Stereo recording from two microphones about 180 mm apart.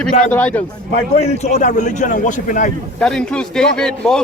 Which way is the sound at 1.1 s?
40° left (ahead or behind).